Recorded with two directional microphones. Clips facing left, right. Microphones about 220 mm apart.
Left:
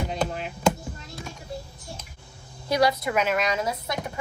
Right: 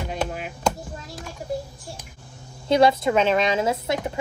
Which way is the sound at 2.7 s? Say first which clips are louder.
Right 5 dB; 25° right (ahead or behind).